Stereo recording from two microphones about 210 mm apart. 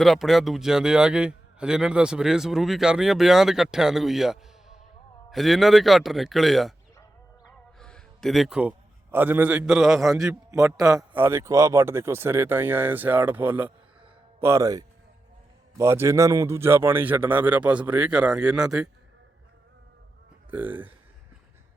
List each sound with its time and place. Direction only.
0.0 s a man's voice: centre (ahead or behind)
7.8 s music: 5° left (ahead or behind)
9.1 s a man's voice: 10° right (ahead or behind)
10.2 s speech: 15° right (ahead or behind)
20.5 s speech: 10° right (ahead or behind)